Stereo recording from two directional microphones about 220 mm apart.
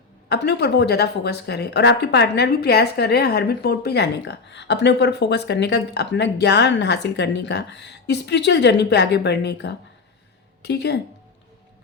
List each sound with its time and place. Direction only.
0.3 s speech: 50° left (ahead or behind)